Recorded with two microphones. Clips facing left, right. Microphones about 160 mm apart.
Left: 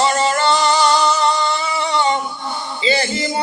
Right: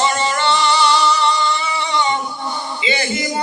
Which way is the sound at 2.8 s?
35° left (ahead or behind).